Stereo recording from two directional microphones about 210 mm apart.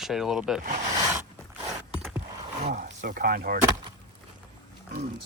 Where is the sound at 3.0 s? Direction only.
45° right (ahead or behind).